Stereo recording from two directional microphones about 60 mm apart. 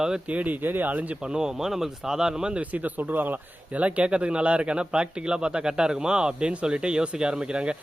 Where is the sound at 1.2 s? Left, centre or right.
Centre.